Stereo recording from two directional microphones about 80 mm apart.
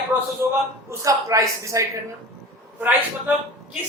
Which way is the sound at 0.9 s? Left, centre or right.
Right.